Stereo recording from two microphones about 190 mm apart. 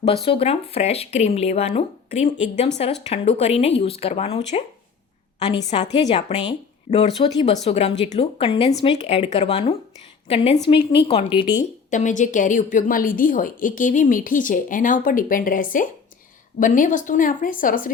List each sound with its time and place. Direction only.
0.0 s speech: 30° left (ahead or behind)
5.6 s a woman's voice: 35° left (ahead or behind)
11.9 s a woman's voice: 40° left (ahead or behind)